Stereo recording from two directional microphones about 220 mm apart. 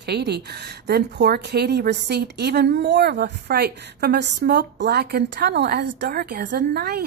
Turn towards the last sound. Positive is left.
turn(degrees=-45)  # may be behind; listen again after turning